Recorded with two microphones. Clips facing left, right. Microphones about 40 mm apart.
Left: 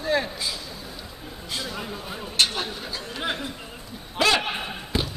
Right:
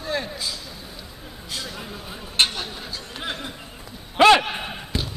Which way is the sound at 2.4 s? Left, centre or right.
Right.